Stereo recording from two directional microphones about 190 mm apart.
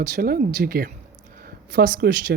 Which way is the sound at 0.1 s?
50° right (ahead or behind).